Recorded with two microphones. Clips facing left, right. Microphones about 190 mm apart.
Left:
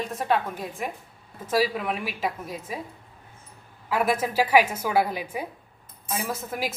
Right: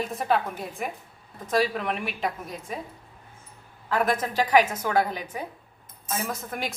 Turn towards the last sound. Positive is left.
turn(degrees=5)  # may be behind; listen again after turning